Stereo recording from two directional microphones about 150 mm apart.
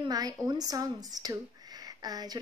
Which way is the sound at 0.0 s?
25° right (ahead or behind).